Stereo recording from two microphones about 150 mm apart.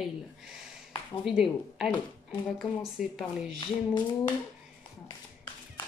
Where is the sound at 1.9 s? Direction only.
10° left (ahead or behind).